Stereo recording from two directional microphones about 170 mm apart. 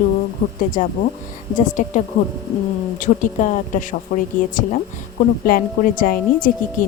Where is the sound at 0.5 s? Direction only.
50° left (ahead or behind).